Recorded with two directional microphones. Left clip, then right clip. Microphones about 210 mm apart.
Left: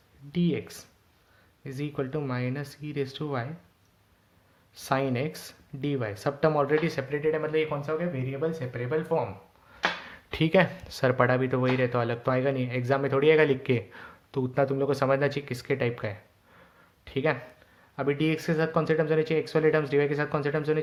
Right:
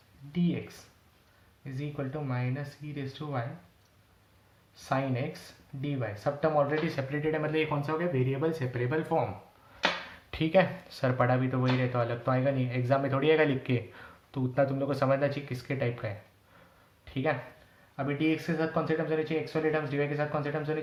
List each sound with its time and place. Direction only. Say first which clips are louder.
0.3 s speech: left 4 dB; 50° left (ahead or behind)
4.7 s speech: left 4 dB; 50° left (ahead or behind); by 9.2 s 25° left (ahead or behind)
10.3 s speech: left 2 dB; 35° left (ahead or behind)